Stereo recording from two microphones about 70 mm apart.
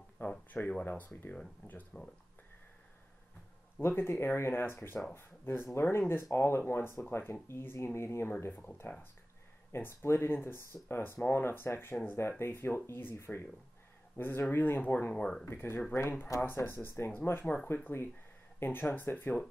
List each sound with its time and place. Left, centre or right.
0.5 s speech: left
3.8 s speech: left
9.7 s speech: left; by 15.4 s centre
15.4 s speech: left